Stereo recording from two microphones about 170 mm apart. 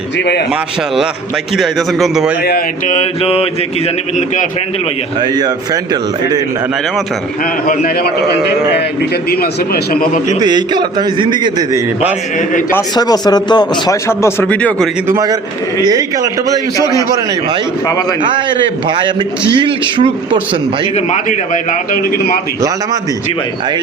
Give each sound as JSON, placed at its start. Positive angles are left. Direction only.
{"t": 1.5, "sound": "a man's voice", "side_deg": 0}
{"t": 2.4, "sound": "a man's voice", "side_deg": 65}
{"t": 2.8, "sound": "mantra", "side_deg": 40}
{"t": 5.2, "sound": "a man's voice", "side_deg": -25}
{"t": 7.7, "sound": "a man's voice", "side_deg": 65}
{"t": 9.3, "sound": "a man's voice", "side_deg": 65}
{"t": 10.4, "sound": "a man's voice", "side_deg": -25}
{"t": 13.0, "sound": "a man's voice", "side_deg": 25}
{"t": 15.0, "sound": "a man's voice", "side_deg": -20}
{"t": 16.7, "sound": "a man's voice", "side_deg": 20}
{"t": 18.2, "sound": "a man's voice", "side_deg": -30}
{"t": 20.9, "sound": "a man's voice", "side_deg": 45}